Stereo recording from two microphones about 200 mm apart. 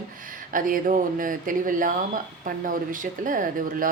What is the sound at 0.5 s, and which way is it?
Speech, 40° right (ahead or behind).